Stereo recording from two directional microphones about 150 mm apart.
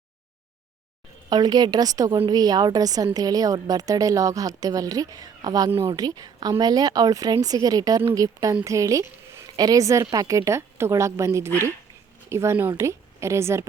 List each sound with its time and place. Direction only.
1.3 s a woman's voice: 25° right (ahead or behind)